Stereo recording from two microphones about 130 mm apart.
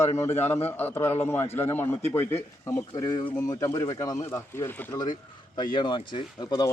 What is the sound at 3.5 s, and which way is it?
A man's voice, 25° left (ahead or behind).